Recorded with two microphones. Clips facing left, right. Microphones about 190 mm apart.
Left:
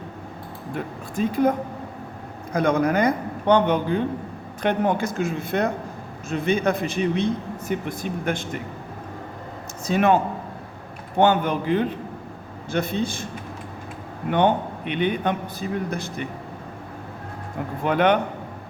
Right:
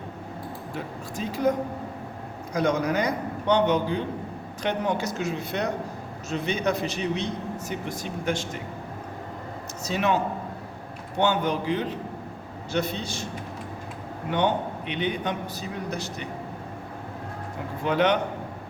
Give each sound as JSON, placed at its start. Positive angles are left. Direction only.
{"t": 1.1, "sound": "a man's voice", "side_deg": 55}
{"t": 9.8, "sound": "a man's voice", "side_deg": 55}
{"t": 11.2, "sound": "a man's voice", "side_deg": 55}
{"t": 14.3, "sound": "a man's voice", "side_deg": 55}
{"t": 17.8, "sound": "a man's voice", "side_deg": 55}